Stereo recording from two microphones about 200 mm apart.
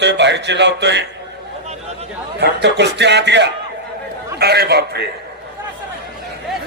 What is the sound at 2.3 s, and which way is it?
A man's voice, 55° right (ahead or behind).